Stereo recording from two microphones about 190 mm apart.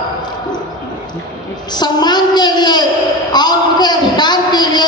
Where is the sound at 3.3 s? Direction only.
20° left (ahead or behind).